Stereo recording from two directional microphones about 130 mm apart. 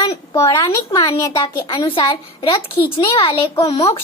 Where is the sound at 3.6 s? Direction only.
50° left (ahead or behind).